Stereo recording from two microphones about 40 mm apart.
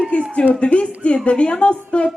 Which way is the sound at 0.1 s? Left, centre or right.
Left.